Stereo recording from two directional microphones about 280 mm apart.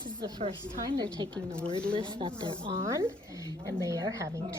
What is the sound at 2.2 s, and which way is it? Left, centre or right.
A woman's voice, centre.